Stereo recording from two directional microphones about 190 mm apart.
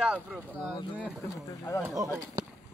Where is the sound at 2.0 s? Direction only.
15° right (ahead or behind).